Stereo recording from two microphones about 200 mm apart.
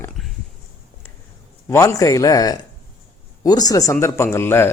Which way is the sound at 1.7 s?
15° left (ahead or behind).